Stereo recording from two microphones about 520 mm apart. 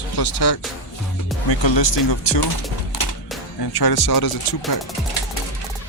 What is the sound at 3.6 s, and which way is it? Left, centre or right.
Speech, left.